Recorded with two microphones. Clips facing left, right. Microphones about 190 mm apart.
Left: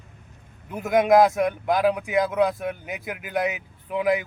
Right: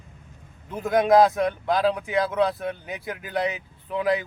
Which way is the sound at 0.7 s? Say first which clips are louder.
Left 1 dB; 15° left (ahead or behind).